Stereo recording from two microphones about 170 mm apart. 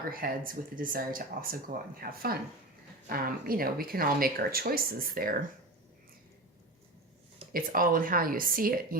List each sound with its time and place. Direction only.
0.1 s speech: 55° right (ahead or behind)
7.5 s speech: 55° right (ahead or behind)